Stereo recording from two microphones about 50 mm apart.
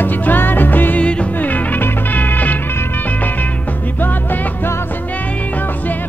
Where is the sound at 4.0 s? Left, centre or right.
Left.